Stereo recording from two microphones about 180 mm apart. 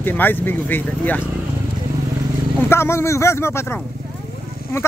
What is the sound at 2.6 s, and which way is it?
Speech, 15° left (ahead or behind).